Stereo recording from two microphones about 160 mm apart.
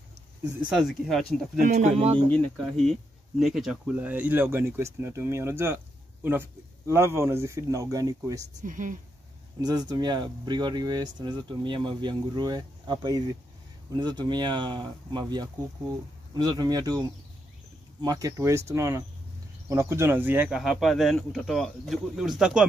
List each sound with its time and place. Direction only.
0.7 s speech: centre (ahead or behind)
1.6 s speech: 50° right (ahead or behind)
2.3 s speech: 5° left (ahead or behind); by 5.8 s 15° right (ahead or behind)
6.9 s speech: 15° right (ahead or behind)
8.5 s speech: 55° right (ahead or behind)
9.6 s speech: 25° right (ahead or behind); by 22.7 s 5° right (ahead or behind)